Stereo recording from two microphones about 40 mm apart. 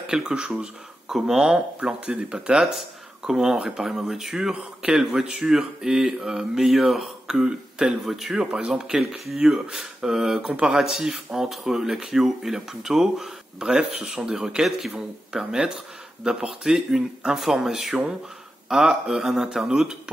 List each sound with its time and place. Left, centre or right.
0.1 s speech: right
1.0 s speech: centre
2.6 s a man's voice: centre
3.3 s speech: centre
8.0 s a man's voice: centre
10.4 s speech: right
10.8 s speech: centre